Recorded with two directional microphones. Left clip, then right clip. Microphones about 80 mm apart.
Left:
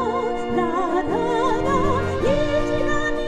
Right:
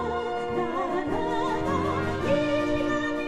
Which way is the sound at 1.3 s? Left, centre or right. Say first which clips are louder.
Left 8 dB; left.